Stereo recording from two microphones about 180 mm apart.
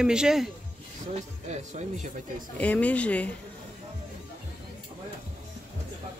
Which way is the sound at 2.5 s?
10° left (ahead or behind).